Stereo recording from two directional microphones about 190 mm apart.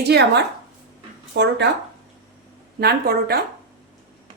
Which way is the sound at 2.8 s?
55° right (ahead or behind).